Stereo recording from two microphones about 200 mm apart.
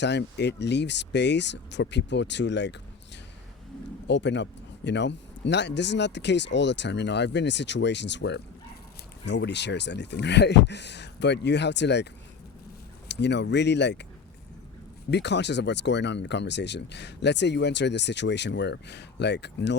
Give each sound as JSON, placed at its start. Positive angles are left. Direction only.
{"t": 0.0, "sound": "speech", "side_deg": 60}
{"t": 4.0, "sound": "speech", "side_deg": 60}
{"t": 13.1, "sound": "speech", "side_deg": 60}
{"t": 15.1, "sound": "speech", "side_deg": 60}